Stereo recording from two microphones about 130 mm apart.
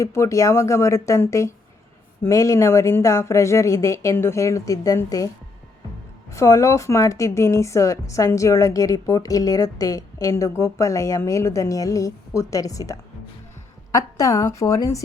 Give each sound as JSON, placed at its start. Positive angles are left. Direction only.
{"t": 0.0, "sound": "a woman's voice", "side_deg": 20}
{"t": 6.3, "sound": "a woman's voice", "side_deg": 20}